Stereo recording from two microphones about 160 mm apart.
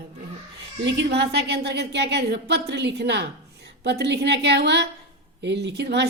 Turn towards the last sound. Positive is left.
turn(degrees=-90)